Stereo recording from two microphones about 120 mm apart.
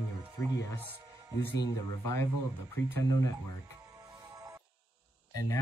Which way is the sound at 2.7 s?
25° left (ahead or behind).